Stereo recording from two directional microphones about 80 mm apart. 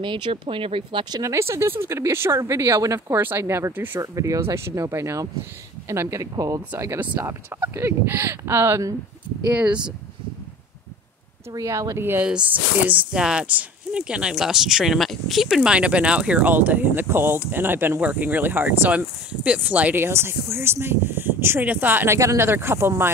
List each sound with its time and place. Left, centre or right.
0.0 s speech: right
1.2 s speech: right
3.1 s speech: right
4.0 s speech: right
7.0 s speech: right
9.5 s speech: centre
11.5 s speech: right
12.0 s speech: right
13.1 s speech: centre
15.4 s speech: centre
20.1 s speech: right